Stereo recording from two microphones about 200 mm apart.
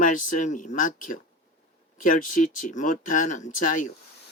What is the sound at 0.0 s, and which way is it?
Speech, 40° left (ahead or behind).